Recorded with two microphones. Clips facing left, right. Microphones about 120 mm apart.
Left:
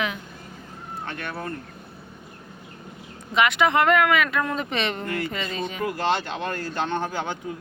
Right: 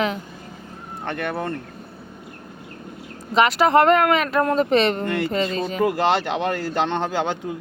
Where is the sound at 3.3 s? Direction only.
35° right (ahead or behind).